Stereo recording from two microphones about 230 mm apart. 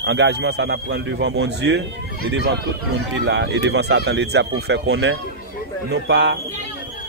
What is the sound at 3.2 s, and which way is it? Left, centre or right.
Speech, right.